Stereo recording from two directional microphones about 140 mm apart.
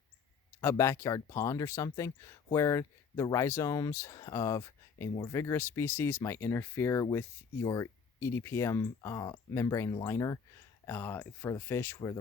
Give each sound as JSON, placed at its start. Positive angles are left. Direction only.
{"t": 0.6, "sound": "speech", "side_deg": 20}